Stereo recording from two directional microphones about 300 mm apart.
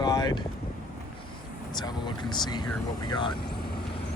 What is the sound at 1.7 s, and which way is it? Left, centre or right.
Speech, centre.